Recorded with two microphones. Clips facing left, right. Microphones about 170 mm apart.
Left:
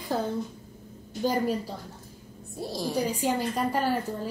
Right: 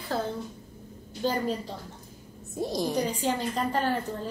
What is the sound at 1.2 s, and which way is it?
Speech, 10° left (ahead or behind).